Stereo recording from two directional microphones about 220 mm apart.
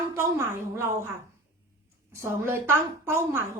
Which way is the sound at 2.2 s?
10° right (ahead or behind).